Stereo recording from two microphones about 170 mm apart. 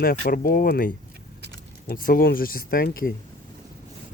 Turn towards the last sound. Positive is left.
turn(degrees=60)  # may be behind; listen again after turning